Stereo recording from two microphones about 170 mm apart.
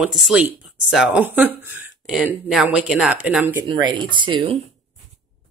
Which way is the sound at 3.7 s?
25° right (ahead or behind).